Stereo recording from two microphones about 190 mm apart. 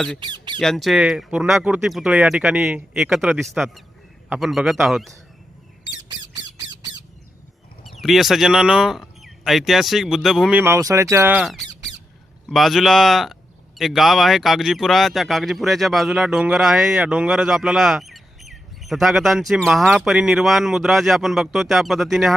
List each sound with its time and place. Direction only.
0.2 s speech: 25° right (ahead or behind)
0.6 s speech: centre (ahead or behind)
6.7 s squawk: 20° right (ahead or behind)
8.0 s speech: centre (ahead or behind)
10.6 s speech: 15° right (ahead or behind)